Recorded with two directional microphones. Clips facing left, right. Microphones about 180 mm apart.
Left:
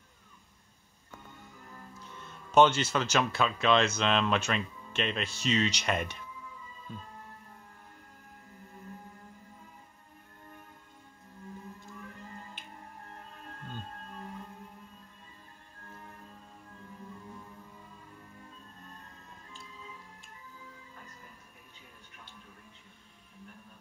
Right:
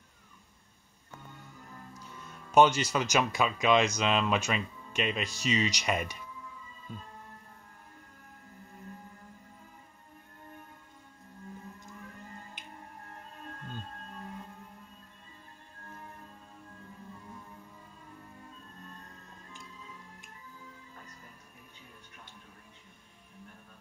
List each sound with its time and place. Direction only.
2.0 s speech: 10° right (ahead or behind)
12.6 s music: 15° right (ahead or behind)